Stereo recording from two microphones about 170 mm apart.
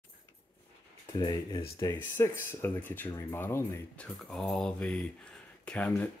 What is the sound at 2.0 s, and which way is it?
Speech, 15° left (ahead or behind).